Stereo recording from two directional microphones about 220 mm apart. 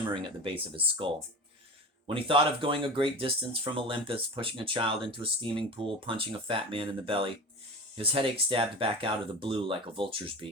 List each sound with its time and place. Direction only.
0.1 s speech: 25° right (ahead or behind)